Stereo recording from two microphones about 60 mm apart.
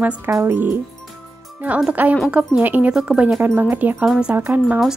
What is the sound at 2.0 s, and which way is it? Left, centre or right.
Speech, right.